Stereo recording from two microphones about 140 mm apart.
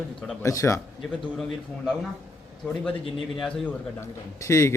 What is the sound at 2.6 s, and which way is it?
Speech, 5° left (ahead or behind).